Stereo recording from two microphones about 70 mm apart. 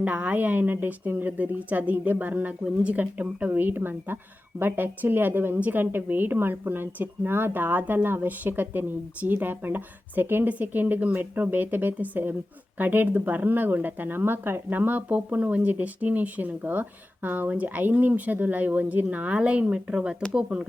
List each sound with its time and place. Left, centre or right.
0.0 s a woman's voice: right